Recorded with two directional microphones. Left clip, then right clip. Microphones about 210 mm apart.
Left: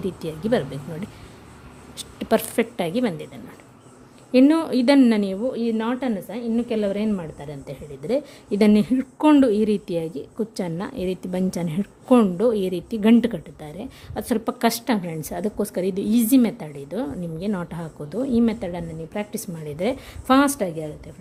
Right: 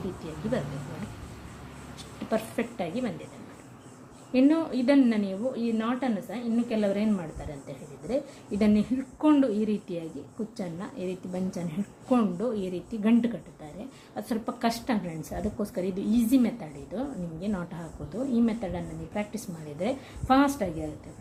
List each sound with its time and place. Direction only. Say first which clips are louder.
0.5 s a woman's voice: left 9 dB; 55° left (ahead or behind)
2.0 s a woman's voice: left 9 dB; 55° left (ahead or behind)
4.3 s a woman's voice: left 7 dB; 55° left (ahead or behind)